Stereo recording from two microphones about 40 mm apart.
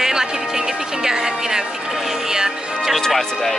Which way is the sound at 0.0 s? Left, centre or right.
Centre.